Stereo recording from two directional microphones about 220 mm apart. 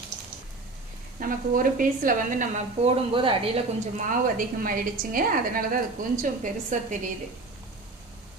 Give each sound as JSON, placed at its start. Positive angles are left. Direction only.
{"t": 1.2, "sound": "speech", "side_deg": -40}